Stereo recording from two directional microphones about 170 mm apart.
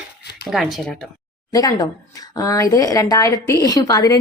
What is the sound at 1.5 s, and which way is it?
Speech, 20° left (ahead or behind).